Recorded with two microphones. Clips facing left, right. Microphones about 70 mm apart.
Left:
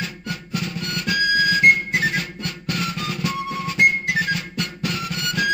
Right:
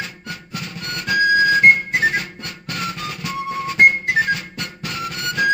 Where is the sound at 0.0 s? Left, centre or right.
Right.